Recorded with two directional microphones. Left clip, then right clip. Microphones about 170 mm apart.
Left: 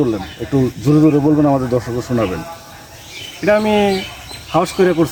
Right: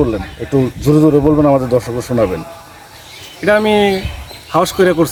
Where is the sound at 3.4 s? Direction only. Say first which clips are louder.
Right 2 dB; centre (ahead or behind).